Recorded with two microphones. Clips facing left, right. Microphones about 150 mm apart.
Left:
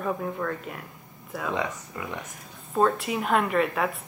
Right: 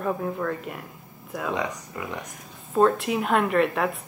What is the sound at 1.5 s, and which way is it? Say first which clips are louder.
Speech: right 1 dB; 15° right (ahead or behind).